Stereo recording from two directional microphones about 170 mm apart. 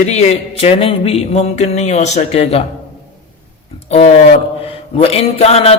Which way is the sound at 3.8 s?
40° left (ahead or behind).